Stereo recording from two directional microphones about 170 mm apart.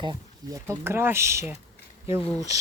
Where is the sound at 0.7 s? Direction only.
15° right (ahead or behind).